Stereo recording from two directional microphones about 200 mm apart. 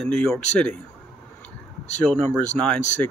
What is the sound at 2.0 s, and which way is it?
Speech, 5° left (ahead or behind).